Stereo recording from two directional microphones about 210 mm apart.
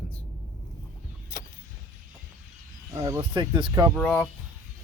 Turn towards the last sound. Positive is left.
turn(degrees=5)  # may be behind; listen again after turning